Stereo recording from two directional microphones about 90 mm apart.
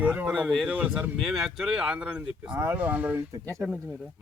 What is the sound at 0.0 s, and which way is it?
Speech, 20° right (ahead or behind).